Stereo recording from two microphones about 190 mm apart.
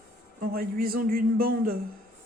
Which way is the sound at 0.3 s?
50° right (ahead or behind).